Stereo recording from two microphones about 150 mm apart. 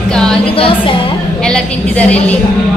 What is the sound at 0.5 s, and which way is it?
Speech, 35° left (ahead or behind).